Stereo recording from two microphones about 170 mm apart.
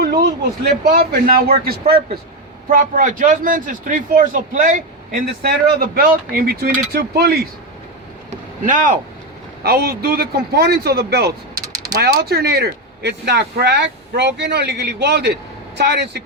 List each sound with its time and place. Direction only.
0.0 s a sound: 80° right
0.7 s a man's voice: 65° right (ahead or behind)
2.6 s speech: 50° right (ahead or behind); by 7.4 s 65° right (ahead or behind)
8.6 s speech: 50° right (ahead or behind)
9.6 s speech: 65° right (ahead or behind)